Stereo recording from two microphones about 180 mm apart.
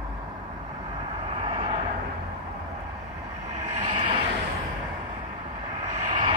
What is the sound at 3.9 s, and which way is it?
Vehicle, 30° right (ahead or behind).